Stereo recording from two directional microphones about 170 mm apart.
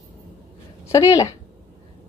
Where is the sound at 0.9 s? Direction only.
20° left (ahead or behind).